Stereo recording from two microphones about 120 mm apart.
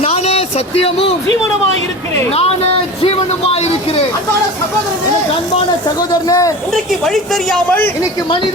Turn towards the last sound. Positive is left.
turn(degrees=5)  # may be behind; listen again after turning